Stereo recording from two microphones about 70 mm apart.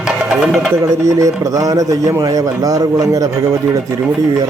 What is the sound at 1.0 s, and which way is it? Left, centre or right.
A man's voice, right.